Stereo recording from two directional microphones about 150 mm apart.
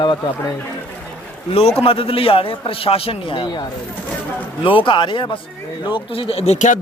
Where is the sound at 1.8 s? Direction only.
40° left (ahead or behind).